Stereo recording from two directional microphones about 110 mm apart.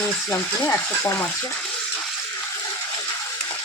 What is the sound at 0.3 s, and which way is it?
Speech, 20° left (ahead or behind).